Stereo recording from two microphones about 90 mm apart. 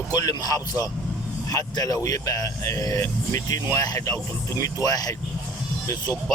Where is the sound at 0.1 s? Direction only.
45° left (ahead or behind).